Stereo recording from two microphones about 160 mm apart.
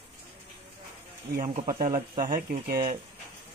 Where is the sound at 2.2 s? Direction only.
60° right (ahead or behind).